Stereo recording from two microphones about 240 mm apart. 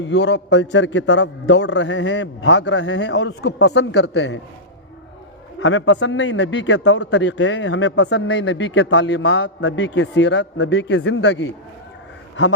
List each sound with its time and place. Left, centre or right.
0.0 s a man's voice: left
5.5 s a man's voice: left